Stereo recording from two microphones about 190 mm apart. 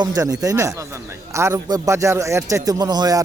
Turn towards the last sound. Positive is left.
turn(degrees=-20)  # may be behind; listen again after turning